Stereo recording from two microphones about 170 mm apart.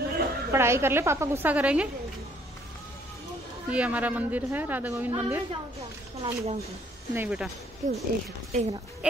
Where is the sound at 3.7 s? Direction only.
10° right (ahead or behind).